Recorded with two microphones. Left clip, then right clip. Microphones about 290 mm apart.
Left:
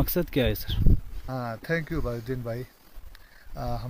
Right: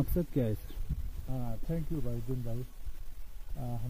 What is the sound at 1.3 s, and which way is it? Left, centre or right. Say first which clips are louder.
Speech: left 11 dB; left.